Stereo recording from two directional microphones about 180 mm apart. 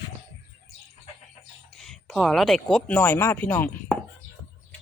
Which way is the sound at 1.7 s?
5° left (ahead or behind).